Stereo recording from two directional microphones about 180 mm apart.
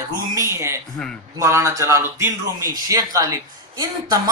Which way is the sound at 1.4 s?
15° right (ahead or behind).